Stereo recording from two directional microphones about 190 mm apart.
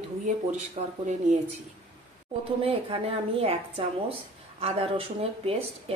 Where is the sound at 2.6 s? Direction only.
30° right (ahead or behind).